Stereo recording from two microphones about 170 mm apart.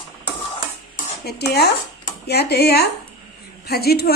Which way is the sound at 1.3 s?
70° left (ahead or behind).